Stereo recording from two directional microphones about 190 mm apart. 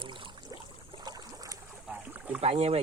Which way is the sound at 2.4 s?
30° right (ahead or behind).